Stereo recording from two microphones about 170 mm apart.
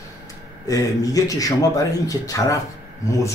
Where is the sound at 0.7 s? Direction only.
20° left (ahead or behind).